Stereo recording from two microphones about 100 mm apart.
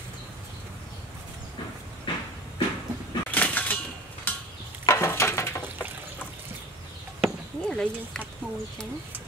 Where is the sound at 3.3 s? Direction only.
15° left (ahead or behind).